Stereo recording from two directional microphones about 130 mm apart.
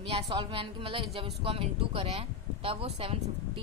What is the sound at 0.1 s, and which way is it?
A woman's voice, 40° right (ahead or behind).